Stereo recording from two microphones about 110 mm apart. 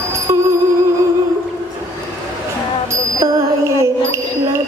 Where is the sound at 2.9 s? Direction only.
30° right (ahead or behind).